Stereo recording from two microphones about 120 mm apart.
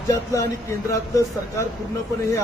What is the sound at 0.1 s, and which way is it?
Speech, 25° left (ahead or behind).